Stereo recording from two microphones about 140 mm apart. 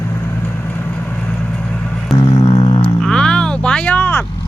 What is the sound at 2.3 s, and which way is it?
Music, 25° left (ahead or behind).